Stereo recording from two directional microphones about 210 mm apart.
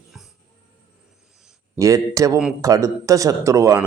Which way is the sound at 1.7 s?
15° right (ahead or behind).